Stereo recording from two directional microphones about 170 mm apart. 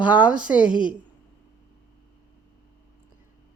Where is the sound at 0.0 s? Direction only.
10° right (ahead or behind).